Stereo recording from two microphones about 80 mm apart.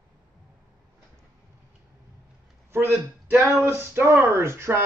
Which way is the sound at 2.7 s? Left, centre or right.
Right.